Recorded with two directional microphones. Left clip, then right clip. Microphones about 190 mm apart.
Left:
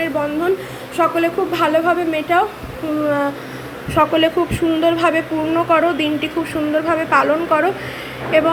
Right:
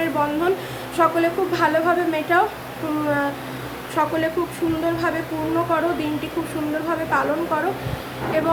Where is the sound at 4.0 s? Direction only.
5° left (ahead or behind).